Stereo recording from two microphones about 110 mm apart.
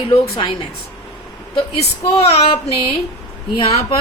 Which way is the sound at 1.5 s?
65° left (ahead or behind).